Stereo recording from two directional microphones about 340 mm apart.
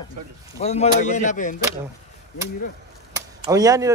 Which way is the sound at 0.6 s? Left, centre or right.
Centre.